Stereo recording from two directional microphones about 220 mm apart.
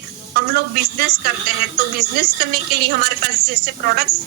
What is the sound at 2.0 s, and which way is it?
A woman's voice, 45° right (ahead or behind).